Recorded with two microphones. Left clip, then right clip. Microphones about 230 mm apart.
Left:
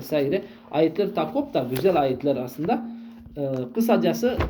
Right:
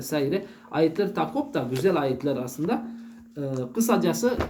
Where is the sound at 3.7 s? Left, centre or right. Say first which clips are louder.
Left 2 dB; centre.